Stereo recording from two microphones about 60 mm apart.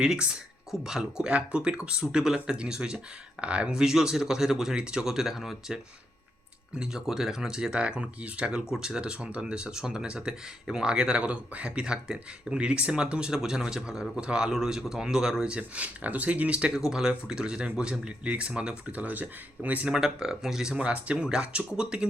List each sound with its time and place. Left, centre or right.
0.0 s speech: centre
15.5 s speech: right
19.9 s speech: centre